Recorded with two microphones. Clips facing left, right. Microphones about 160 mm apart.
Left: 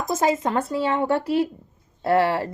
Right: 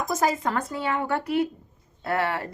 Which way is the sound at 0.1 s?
25° left (ahead or behind).